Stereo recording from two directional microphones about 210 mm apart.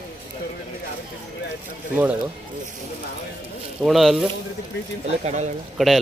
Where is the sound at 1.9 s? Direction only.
10° right (ahead or behind).